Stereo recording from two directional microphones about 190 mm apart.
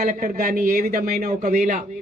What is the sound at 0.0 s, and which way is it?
Speech, 50° right (ahead or behind).